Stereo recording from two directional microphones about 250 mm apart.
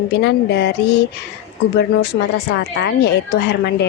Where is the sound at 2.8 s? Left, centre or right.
Left.